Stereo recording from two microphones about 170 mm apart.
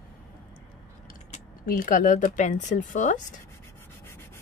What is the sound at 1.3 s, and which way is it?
Speech, 50° left (ahead or behind).